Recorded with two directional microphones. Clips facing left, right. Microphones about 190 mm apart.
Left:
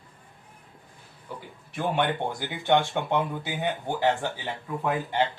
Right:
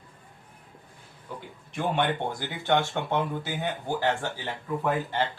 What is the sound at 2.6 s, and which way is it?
Speech, 15° left (ahead or behind).